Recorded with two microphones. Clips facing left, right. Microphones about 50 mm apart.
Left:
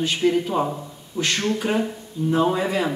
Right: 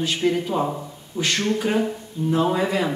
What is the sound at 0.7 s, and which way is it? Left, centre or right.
Speech, centre.